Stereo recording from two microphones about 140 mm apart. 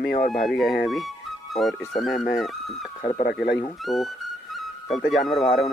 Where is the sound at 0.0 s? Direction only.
90° left.